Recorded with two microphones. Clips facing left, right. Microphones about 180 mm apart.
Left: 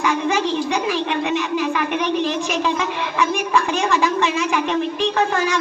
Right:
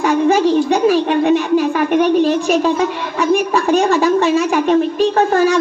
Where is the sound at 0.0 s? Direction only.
40° right (ahead or behind); by 2.7 s 55° right (ahead or behind).